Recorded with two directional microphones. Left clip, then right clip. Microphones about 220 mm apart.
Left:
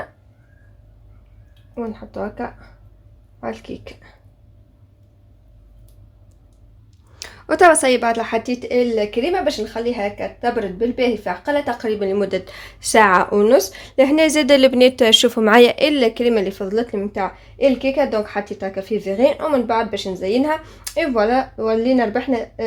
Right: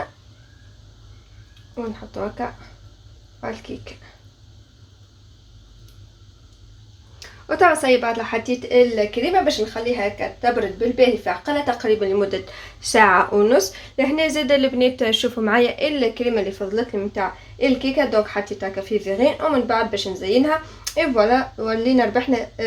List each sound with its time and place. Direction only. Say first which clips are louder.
1.7 s speech: left 2 dB; 30° left (ahead or behind)
3.4 s speech: left 2 dB; 35° left (ahead or behind)
7.2 s speech: left 3 dB; 50° left (ahead or behind); by 22.6 s 25° left (ahead or behind)